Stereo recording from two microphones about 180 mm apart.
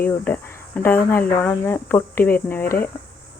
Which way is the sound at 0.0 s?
10° left (ahead or behind).